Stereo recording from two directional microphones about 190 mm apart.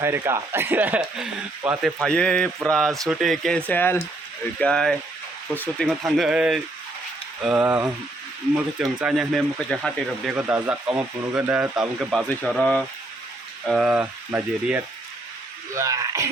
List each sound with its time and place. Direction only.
0.0 s speech: 15° right (ahead or behind)
2.0 s speech: 5° left (ahead or behind); by 16.3 s 15° right (ahead or behind)